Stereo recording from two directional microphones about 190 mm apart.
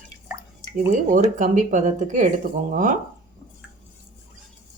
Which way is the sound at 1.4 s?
40° right (ahead or behind).